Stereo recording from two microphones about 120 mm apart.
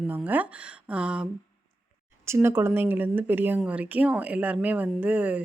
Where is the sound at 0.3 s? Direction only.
10° right (ahead or behind).